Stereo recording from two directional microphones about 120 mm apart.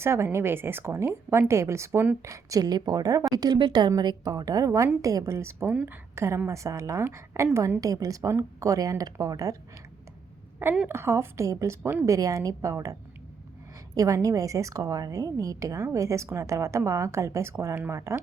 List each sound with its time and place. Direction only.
0.0 s a woman's voice: 20° right (ahead or behind)
10.8 s a woman's voice: 20° right (ahead or behind)
12.1 s a woman's voice: 25° right (ahead or behind)